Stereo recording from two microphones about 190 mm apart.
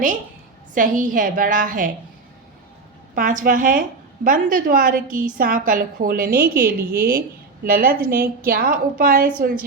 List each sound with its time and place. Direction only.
0.7 s a woman's voice: 45° right (ahead or behind)
3.2 s a woman's voice: 45° right (ahead or behind)